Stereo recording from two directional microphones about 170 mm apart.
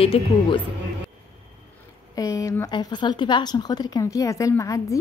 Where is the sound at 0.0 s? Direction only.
35° left (ahead or behind).